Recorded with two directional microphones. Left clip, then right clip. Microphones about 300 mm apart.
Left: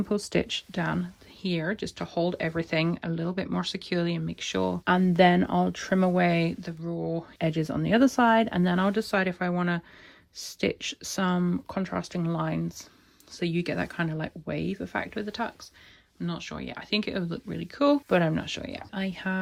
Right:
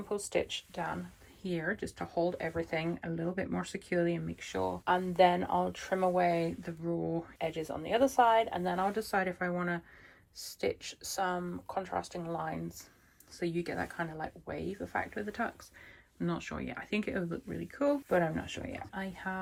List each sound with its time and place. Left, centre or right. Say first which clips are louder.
0.7 s speech: left 6 dB; left
1.4 s speech: left 5 dB; centre
4.9 s speech: left 5 dB; left
6.6 s speech: left 2 dB; centre
7.3 s speech: left 7 dB; left